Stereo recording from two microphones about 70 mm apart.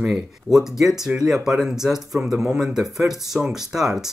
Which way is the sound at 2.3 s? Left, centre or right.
Centre.